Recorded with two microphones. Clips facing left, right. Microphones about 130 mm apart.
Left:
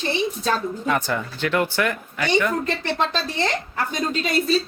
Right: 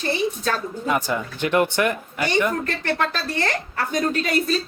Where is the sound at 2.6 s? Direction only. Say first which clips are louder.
Even; 20° left (ahead or behind).